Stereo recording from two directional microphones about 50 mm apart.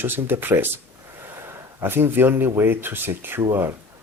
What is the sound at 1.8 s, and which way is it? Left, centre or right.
Speech, right.